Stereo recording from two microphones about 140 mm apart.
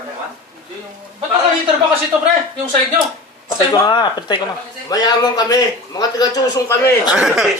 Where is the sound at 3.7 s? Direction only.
30° left (ahead or behind).